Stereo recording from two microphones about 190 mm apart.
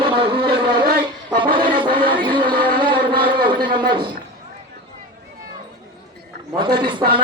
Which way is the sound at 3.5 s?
25° right (ahead or behind).